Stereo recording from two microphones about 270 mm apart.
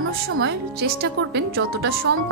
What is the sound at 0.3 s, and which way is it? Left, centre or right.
A woman's voice, right.